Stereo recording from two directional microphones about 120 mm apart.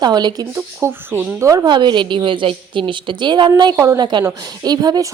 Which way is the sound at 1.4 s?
30° right (ahead or behind).